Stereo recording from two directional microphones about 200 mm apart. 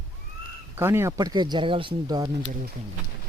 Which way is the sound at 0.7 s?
10° right (ahead or behind).